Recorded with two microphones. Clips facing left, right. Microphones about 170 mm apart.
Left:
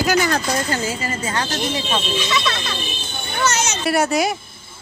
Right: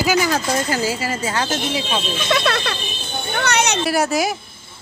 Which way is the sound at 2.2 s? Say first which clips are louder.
Right 3 dB; 55° right (ahead or behind).